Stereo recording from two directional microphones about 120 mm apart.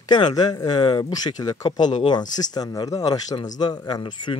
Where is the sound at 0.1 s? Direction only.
35° left (ahead or behind).